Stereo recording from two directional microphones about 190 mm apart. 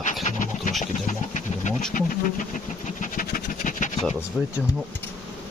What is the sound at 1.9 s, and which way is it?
Speech, 45° left (ahead or behind).